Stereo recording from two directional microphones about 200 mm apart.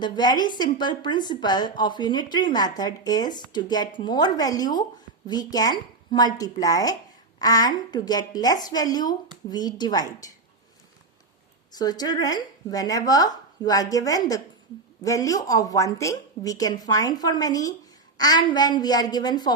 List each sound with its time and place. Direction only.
0.0 s a woman's voice: 20° left (ahead or behind)
11.7 s a woman's voice: 20° left (ahead or behind)